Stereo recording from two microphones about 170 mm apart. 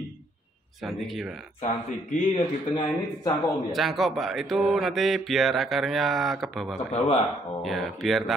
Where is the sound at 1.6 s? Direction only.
50° left (ahead or behind).